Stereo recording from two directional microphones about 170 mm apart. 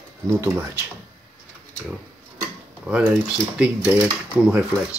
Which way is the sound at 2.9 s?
5° right (ahead or behind).